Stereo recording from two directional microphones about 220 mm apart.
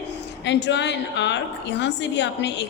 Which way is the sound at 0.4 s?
50° left (ahead or behind).